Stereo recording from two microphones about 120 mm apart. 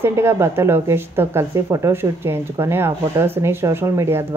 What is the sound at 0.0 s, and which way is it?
A woman's voice, 20° right (ahead or behind).